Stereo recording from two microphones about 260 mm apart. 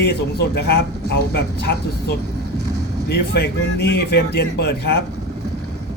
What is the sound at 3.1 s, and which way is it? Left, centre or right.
Speech, left.